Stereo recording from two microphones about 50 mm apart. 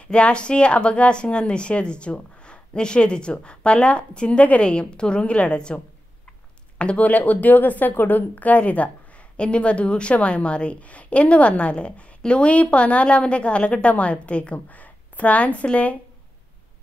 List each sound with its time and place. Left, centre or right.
0.0 s a woman's voice: left
6.8 s a woman's voice: left